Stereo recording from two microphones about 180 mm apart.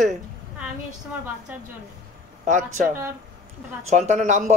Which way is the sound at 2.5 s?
40° right (ahead or behind).